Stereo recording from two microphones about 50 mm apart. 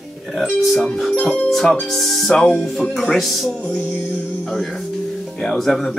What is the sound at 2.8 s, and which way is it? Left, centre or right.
Speech, centre.